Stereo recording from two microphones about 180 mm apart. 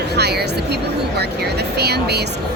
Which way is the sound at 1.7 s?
65° right (ahead or behind).